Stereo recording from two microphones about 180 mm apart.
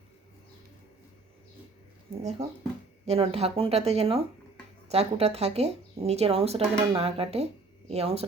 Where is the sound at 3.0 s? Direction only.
35° right (ahead or behind).